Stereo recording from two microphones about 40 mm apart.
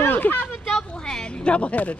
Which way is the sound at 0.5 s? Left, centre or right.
Centre.